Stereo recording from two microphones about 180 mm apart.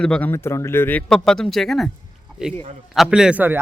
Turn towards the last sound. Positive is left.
turn(degrees=-10)  # may be behind; listen again after turning